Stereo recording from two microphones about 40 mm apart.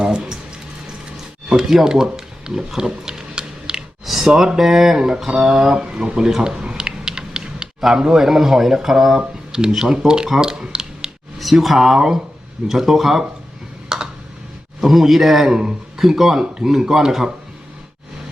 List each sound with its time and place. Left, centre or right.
0.0 s a sound: centre
4.0 s speech: centre
6.4 s typing: centre
7.9 s speech: centre
9.1 s speech: centre
10.4 s a sound: centre
11.3 s speech: centre
13.9 s computer keyboard: centre
14.8 s a man's voice: centre